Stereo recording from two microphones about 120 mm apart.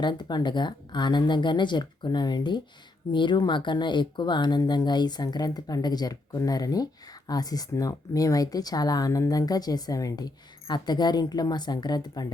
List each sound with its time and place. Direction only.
0.0 s speech: 40° left (ahead or behind)